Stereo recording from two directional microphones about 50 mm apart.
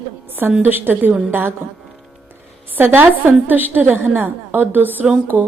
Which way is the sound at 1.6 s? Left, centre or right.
Right.